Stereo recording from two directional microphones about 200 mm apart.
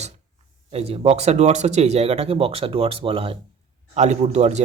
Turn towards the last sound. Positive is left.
turn(degrees=-35)  # may be behind; listen again after turning